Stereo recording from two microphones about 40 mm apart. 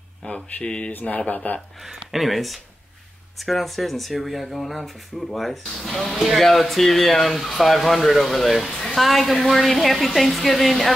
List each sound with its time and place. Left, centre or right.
0.2 s speech: left
0.9 s speech: left
1.8 s speech: centre